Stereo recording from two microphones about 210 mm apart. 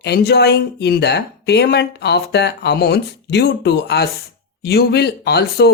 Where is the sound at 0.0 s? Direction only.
50° left (ahead or behind).